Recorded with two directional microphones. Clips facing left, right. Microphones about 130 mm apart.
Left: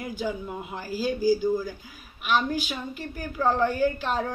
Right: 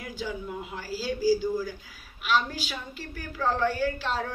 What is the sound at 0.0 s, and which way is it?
A woman's voice, 25° left (ahead or behind).